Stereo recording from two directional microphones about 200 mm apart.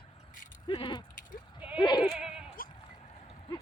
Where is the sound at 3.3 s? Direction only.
25° left (ahead or behind).